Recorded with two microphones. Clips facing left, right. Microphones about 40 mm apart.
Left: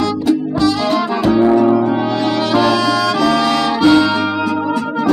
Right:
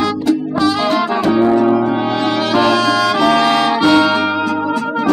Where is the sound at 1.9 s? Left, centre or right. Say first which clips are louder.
Even; centre.